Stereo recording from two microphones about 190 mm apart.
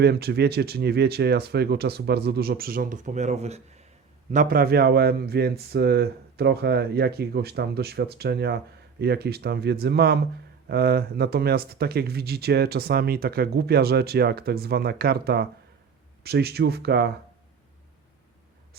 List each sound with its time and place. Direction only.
0.0 s speech: 60° right (ahead or behind); by 3.8 s 35° right (ahead or behind)
4.3 s speech: 45° right (ahead or behind)